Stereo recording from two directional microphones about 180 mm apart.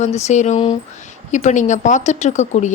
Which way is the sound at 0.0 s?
40° left (ahead or behind).